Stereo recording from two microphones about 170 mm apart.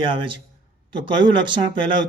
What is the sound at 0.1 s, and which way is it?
Speech, 30° right (ahead or behind).